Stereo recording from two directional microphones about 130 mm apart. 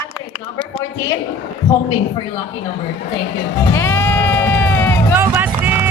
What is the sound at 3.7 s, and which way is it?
Bleat, 15° left (ahead or behind).